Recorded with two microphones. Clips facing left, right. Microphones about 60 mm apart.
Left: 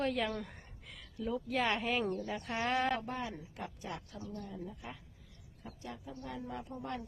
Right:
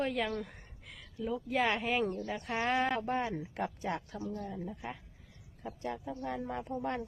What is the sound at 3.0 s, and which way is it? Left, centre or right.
Speech, right.